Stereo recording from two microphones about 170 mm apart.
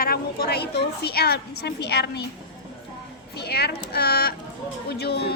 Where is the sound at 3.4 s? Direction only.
70° left (ahead or behind).